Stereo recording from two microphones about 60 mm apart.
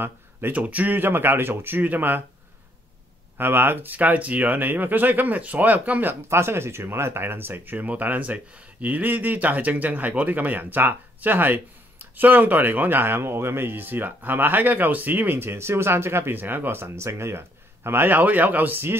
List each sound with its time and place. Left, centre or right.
0.5 s speech: right
3.3 s speech: right
6.2 s speech: right